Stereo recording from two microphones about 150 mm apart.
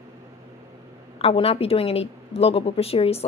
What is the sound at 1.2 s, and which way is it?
A woman's voice, 40° left (ahead or behind).